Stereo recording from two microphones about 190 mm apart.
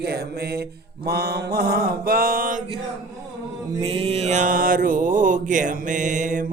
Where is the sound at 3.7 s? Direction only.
30° right (ahead or behind).